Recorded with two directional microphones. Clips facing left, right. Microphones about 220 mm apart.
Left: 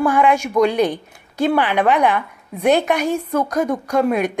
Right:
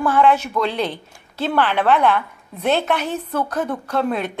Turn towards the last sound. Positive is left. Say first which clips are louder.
# left 4 dB
turn(degrees=15)  # may be behind; listen again after turning